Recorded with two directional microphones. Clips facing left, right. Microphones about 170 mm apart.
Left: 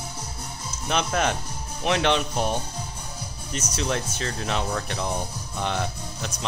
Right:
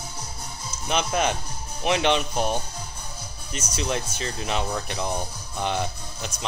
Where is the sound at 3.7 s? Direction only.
10° right (ahead or behind).